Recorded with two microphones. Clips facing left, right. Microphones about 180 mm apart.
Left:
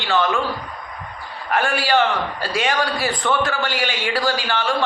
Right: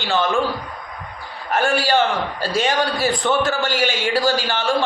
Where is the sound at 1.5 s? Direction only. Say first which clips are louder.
Right 2 dB; 25° right (ahead or behind).